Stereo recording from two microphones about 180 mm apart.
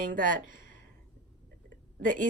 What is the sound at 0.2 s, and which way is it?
Speech, 50° right (ahead or behind).